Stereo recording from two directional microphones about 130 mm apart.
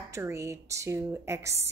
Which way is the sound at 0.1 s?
20° right (ahead or behind).